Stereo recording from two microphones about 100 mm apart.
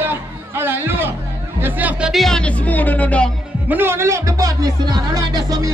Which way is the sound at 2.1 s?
5° left (ahead or behind).